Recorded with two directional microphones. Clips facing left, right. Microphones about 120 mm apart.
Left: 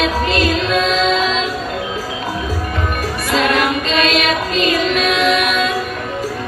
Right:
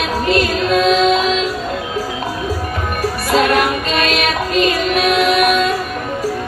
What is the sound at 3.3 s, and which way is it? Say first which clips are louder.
Music: right 2 dB; 45° right (ahead or behind).